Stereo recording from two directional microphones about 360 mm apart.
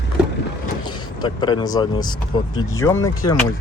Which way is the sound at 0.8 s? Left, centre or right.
Centre.